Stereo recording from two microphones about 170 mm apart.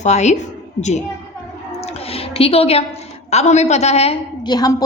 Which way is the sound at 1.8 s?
35° left (ahead or behind).